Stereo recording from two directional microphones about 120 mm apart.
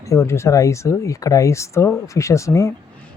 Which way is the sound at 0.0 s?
25° left (ahead or behind).